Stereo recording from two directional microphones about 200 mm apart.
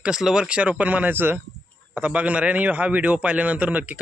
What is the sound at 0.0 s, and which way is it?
A man's voice, 5° right (ahead or behind).